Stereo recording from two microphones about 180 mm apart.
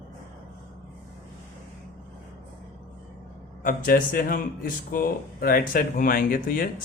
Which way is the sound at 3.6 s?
50° left (ahead or behind).